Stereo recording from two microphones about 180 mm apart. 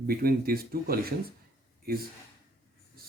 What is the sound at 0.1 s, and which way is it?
Speech, 55° right (ahead or behind).